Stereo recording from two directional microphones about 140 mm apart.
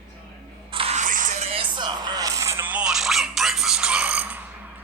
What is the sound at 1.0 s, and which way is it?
Music, 65° right (ahead or behind).